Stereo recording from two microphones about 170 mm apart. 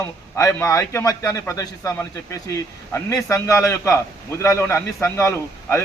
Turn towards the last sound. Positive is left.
turn(degrees=15)  # may be behind; listen again after turning